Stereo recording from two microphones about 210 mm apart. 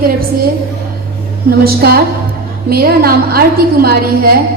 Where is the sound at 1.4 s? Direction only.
45° right (ahead or behind).